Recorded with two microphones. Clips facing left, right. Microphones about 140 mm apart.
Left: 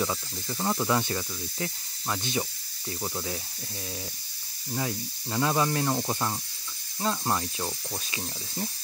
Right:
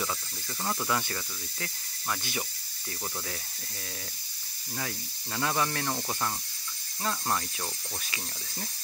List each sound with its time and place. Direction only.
0.0 s speech: 20° left (ahead or behind)
4.7 s speech: 20° left (ahead or behind)